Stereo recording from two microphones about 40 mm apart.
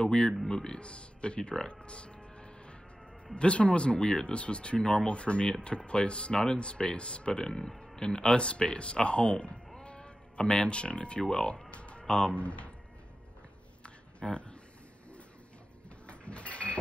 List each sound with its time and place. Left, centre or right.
0.0 s speech: left
0.7 s speech: left
7.4 s speech: centre
11.7 s a sound: left
13.8 s a sound: left
16.1 s printer: left